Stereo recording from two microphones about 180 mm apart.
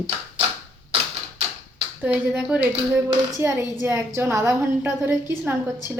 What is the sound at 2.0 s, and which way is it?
A woman's voice, 10° right (ahead or behind).